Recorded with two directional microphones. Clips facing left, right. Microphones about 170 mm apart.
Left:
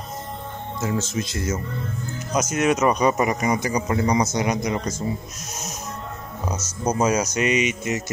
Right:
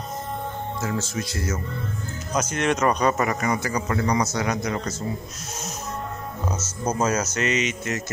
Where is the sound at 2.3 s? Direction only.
10° left (ahead or behind).